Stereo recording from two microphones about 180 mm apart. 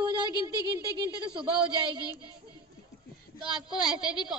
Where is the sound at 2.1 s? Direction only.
20° left (ahead or behind).